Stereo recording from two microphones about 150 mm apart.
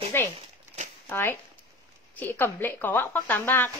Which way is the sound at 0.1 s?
15° left (ahead or behind).